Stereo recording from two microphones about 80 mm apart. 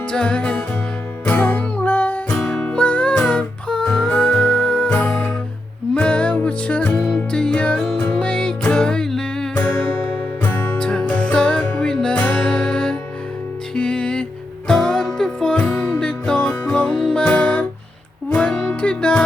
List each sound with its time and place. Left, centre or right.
0.1 s music: centre
2.3 s music: centre; by 10.8 s left
10.8 s music: centre